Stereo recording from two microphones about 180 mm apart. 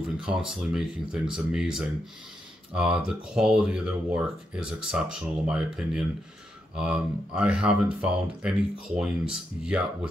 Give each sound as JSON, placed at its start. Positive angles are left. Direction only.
{"t": 0.0, "sound": "speech", "side_deg": -5}